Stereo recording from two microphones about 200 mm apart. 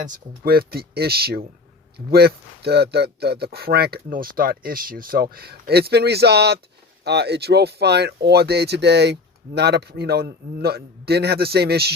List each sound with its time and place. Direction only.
0.0 s speech: 45° right (ahead or behind)